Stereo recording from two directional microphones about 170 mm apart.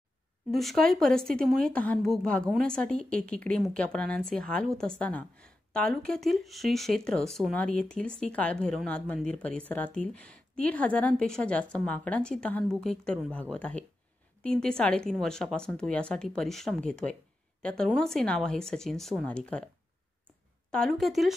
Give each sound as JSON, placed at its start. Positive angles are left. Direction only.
{"t": 0.5, "sound": "a woman's voice", "side_deg": 0}
{"t": 20.7, "sound": "speech", "side_deg": 0}